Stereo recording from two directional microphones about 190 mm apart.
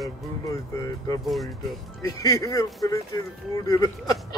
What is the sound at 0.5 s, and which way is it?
Speech, 15° left (ahead or behind).